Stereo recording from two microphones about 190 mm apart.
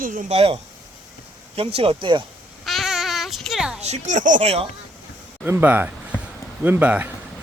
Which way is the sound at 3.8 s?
35° right (ahead or behind).